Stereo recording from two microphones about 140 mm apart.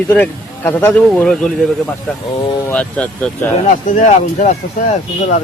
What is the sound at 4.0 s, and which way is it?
Speech, 55° left (ahead or behind).